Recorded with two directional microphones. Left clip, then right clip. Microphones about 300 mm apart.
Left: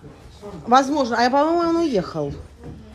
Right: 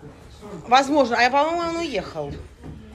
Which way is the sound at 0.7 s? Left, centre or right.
Centre.